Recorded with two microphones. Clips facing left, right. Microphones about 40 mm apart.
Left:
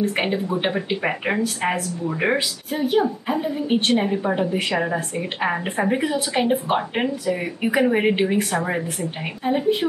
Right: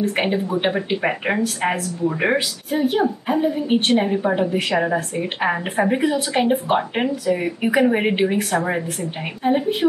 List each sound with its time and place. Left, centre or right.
0.0 s a woman's voice: centre
7.0 s speech: centre
7.3 s a woman's voice: centre